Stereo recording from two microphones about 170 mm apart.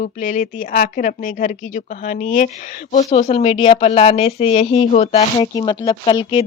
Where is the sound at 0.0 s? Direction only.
50° left (ahead or behind); by 4.9 s 35° left (ahead or behind).